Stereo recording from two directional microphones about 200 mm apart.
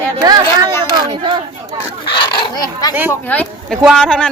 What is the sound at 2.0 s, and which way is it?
Speech, 25° left (ahead or behind).